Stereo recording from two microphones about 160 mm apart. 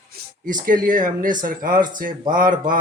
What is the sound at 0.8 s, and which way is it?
Speech, 55° right (ahead or behind).